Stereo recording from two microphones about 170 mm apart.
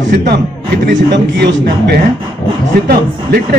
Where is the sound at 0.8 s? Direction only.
75° right (ahead or behind).